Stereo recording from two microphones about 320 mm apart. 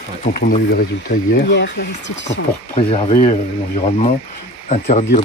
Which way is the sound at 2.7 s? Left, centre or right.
Centre.